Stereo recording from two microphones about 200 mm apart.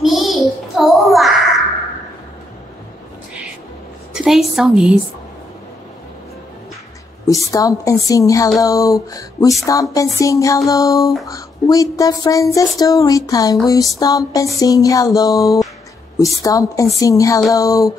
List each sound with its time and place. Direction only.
0.0 s child singing: centre (ahead or behind)
4.1 s a woman's voice: centre (ahead or behind)
7.2 s speech: 15° left (ahead or behind)